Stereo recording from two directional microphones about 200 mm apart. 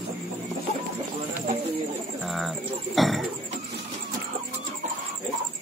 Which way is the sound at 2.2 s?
Centre (ahead or behind).